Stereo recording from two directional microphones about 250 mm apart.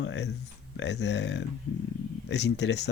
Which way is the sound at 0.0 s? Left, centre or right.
Left.